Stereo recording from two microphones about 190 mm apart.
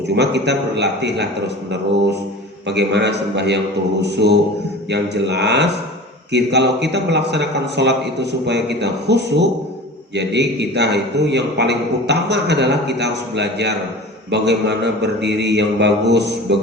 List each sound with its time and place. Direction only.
0.1 s a man's voice: 65° right (ahead or behind)
2.6 s a man's voice: 65° right (ahead or behind)